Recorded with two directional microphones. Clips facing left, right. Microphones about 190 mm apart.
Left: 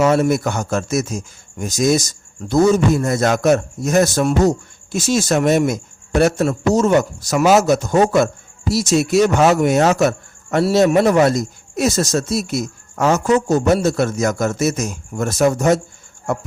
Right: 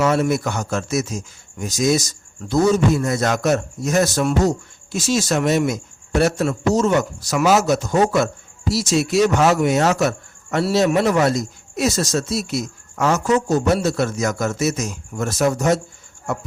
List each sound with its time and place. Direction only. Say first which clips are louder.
0.2 s a man's voice: left 3 dB; 50° left (ahead or behind)